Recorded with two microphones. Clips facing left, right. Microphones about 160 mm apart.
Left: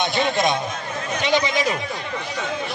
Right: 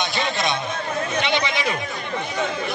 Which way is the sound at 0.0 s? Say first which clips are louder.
Left 4 dB; 50° left (ahead or behind).